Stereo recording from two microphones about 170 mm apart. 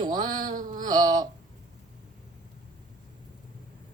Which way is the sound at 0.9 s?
25° right (ahead or behind).